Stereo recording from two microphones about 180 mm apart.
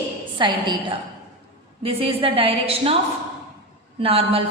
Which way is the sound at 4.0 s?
30° right (ahead or behind).